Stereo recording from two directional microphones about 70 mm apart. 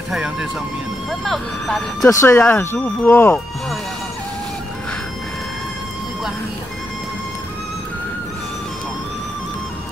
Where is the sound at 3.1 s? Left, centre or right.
Left.